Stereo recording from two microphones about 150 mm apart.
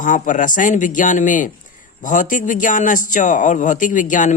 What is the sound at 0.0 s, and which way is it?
Speech, 60° left (ahead or behind).